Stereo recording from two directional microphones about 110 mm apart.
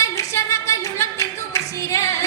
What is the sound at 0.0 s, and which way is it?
Clapping, 25° left (ahead or behind).